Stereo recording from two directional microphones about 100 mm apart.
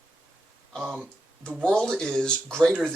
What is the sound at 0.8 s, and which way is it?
Speech, 20° right (ahead or behind).